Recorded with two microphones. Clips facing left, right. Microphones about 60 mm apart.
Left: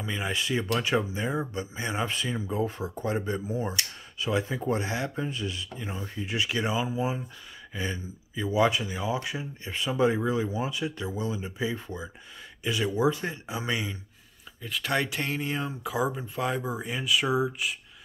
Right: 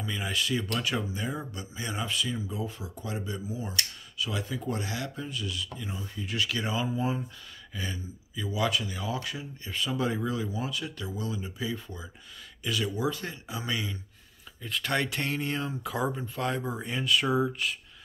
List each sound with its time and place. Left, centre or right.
0.0 s speech: left
7.7 s speech: left
14.6 s speech: centre